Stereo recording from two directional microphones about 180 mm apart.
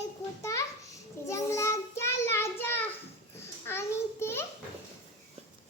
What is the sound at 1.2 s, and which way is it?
Child singing, 15° left (ahead or behind).